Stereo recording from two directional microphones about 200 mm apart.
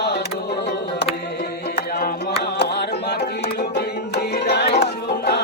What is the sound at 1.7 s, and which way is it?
Music, 50° left (ahead or behind).